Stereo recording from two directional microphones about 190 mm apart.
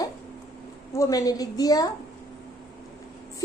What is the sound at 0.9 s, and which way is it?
Speech, 15° left (ahead or behind).